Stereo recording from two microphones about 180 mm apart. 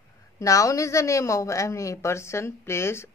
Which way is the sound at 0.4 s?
20° left (ahead or behind).